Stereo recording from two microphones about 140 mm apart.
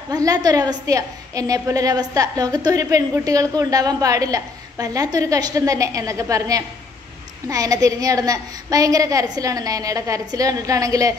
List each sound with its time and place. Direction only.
0.1 s a woman's voice: 25° right (ahead or behind)